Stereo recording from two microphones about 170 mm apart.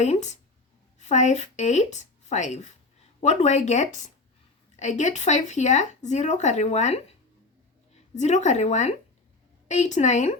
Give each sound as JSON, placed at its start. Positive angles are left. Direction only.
{"t": 0.0, "sound": "a woman's voice", "side_deg": 40}